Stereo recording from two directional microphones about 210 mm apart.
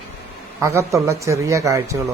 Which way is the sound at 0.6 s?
15° right (ahead or behind).